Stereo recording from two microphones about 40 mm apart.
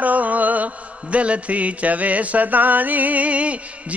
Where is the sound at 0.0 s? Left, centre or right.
Right.